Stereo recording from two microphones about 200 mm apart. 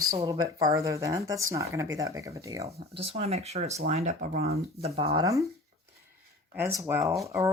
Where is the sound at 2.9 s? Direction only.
30° right (ahead or behind).